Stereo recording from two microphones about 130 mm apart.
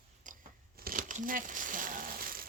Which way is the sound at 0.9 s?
90° right.